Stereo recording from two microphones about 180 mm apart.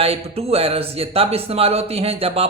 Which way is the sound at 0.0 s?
35° right (ahead or behind).